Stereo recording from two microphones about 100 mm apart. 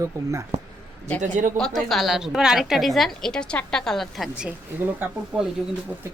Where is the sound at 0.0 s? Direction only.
30° right (ahead or behind).